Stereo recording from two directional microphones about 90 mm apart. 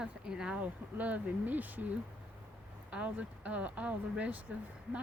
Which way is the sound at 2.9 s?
15° right (ahead or behind).